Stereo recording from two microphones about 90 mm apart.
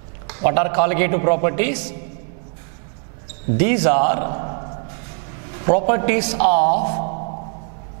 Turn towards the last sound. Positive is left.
turn(degrees=-15)  # may be behind; listen again after turning